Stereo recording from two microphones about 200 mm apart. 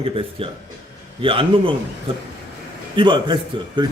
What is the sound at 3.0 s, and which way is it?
Speech, 25° right (ahead or behind).